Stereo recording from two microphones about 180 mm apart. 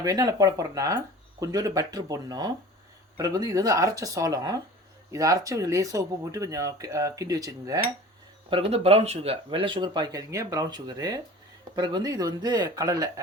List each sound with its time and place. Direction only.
0.0 s speech: 20° right (ahead or behind)
8.4 s speech: 30° right (ahead or behind)